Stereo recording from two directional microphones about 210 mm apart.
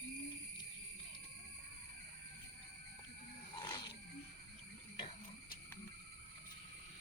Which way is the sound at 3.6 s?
25° left (ahead or behind).